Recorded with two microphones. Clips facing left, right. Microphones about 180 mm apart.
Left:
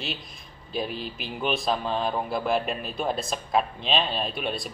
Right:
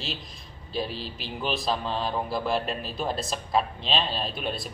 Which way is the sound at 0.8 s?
30° right (ahead or behind).